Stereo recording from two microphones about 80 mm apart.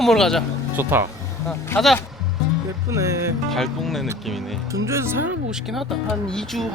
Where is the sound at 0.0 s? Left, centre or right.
Centre.